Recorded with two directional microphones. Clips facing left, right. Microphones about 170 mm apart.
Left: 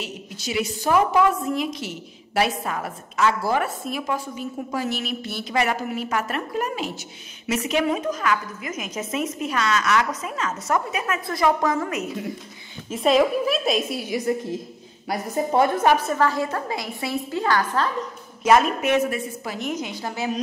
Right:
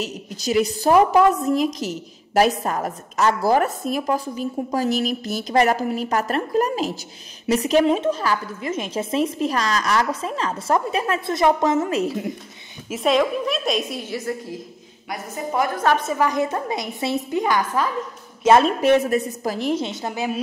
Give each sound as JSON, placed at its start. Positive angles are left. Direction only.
{"t": 0.0, "sound": "a woman's voice", "side_deg": -40}
{"t": 12.9, "sound": "a woman's voice", "side_deg": 0}
{"t": 15.0, "sound": "a woman's voice", "side_deg": 30}
{"t": 16.1, "sound": "a woman's voice", "side_deg": -15}
{"t": 18.4, "sound": "a woman's voice", "side_deg": -30}